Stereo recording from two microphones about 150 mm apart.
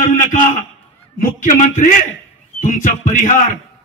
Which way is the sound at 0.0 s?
60° left (ahead or behind).